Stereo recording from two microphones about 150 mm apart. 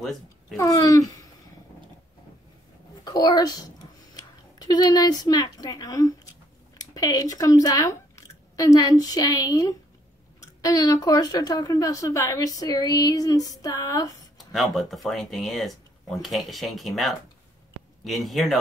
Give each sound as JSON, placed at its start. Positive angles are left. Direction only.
{"t": 0.6, "sound": "a woman's voice", "side_deg": 25}
{"t": 3.0, "sound": "a woman's voice", "side_deg": 25}
{"t": 14.4, "sound": "speech", "side_deg": 0}